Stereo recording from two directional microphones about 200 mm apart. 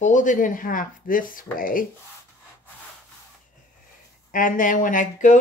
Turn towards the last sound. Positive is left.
turn(degrees=40)  # may be behind; listen again after turning